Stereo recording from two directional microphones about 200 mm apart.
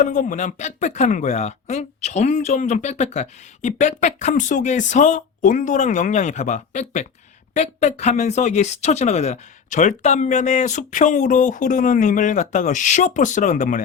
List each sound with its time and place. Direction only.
0.0 s speech: 40° left (ahead or behind)